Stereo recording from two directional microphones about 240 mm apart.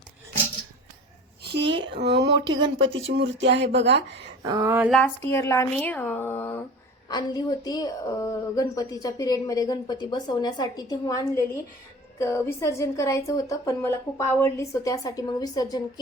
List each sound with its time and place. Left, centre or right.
1.5 s a sound: right
4.4 s speech: centre
4.9 s a woman's voice: centre